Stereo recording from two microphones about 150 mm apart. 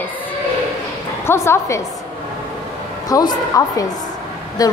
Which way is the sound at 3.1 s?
25° left (ahead or behind).